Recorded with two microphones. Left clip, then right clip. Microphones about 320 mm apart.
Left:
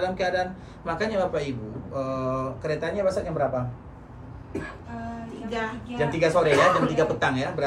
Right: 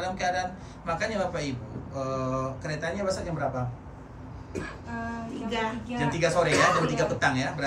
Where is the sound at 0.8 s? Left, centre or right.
Centre.